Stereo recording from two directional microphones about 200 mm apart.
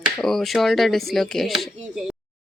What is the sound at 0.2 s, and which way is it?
Speech, centre (ahead or behind).